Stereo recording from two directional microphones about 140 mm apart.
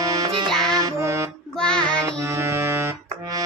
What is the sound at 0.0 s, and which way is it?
Music, 25° right (ahead or behind).